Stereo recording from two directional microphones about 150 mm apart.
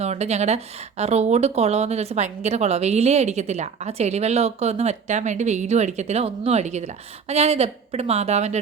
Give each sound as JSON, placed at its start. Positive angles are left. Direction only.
{"t": 0.0, "sound": "a woman's voice", "side_deg": -45}